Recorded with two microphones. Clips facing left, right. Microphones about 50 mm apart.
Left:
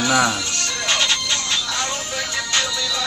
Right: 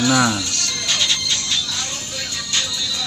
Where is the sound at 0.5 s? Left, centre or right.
Left.